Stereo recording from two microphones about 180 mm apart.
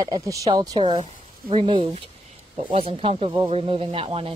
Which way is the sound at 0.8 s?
30° right (ahead or behind).